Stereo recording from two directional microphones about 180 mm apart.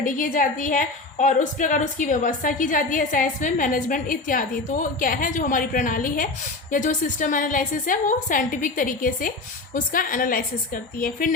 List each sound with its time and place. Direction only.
0.0 s a woman's voice: 50° left (ahead or behind)